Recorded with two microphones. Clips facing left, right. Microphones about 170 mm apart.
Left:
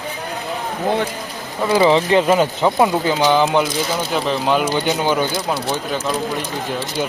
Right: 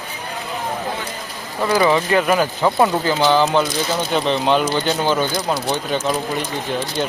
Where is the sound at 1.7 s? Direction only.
25° left (ahead or behind).